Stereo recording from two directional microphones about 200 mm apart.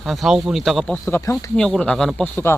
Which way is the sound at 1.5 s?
5° left (ahead or behind).